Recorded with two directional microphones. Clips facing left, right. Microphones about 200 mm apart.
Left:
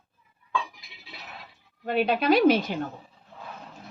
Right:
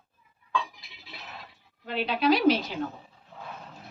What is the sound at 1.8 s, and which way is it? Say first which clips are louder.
Speech: left 2 dB; 50° left (ahead or behind).